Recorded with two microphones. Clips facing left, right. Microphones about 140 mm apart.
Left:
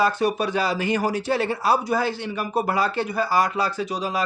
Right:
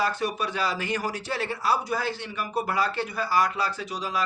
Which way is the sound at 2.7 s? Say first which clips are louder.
Left 4 dB; 15° left (ahead or behind).